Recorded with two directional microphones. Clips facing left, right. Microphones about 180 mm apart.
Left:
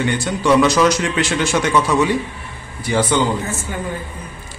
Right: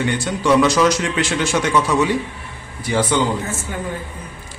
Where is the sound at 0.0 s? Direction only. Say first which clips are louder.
Left 1 dB; 60° left (ahead or behind).